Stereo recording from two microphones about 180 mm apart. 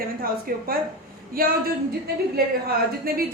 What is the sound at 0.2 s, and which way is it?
A man's voice, 55° right (ahead or behind).